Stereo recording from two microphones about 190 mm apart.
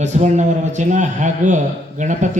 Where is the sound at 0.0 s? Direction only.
40° right (ahead or behind).